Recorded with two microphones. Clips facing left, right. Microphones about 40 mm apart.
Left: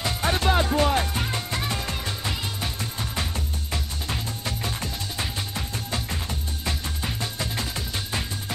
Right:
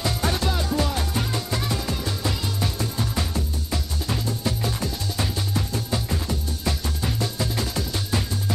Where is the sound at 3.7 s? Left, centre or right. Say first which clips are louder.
Right 3 dB; left.